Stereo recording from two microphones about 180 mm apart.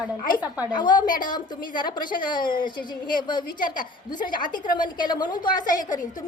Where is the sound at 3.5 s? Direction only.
50° left (ahead or behind).